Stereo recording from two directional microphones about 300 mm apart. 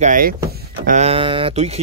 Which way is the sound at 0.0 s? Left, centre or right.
Right.